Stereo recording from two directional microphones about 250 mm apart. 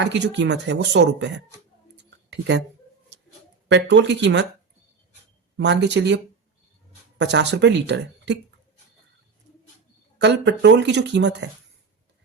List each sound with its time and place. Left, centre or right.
0.0 s speech: right
2.0 s a sound: right
3.7 s speech: right
5.5 s speech: right
7.2 s speech: right
10.2 s speech: right